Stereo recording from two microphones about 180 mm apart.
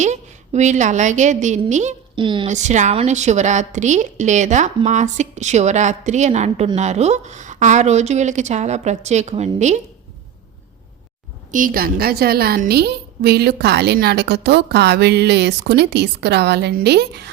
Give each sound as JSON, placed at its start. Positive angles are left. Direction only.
{"t": 0.0, "sound": "a woman's voice", "side_deg": -40}
{"t": 2.1, "sound": "a woman's voice", "side_deg": -25}
{"t": 2.5, "sound": "a woman's voice", "side_deg": -40}
{"t": 11.5, "sound": "a woman's voice", "side_deg": -50}